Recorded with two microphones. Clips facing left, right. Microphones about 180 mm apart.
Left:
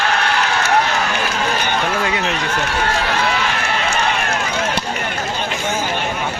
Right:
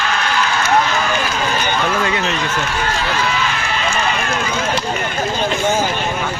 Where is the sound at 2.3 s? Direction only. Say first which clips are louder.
Even; 70° left (ahead or behind).